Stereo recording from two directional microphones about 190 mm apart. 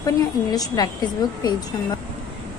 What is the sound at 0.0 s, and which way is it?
A woman's voice, 20° left (ahead or behind).